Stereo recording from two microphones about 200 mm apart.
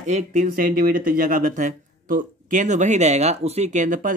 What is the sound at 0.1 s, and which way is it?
Speech, 35° right (ahead or behind).